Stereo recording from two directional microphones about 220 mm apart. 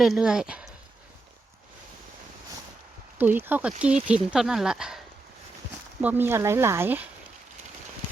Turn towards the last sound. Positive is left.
turn(degrees=-10)  # may be behind; listen again after turning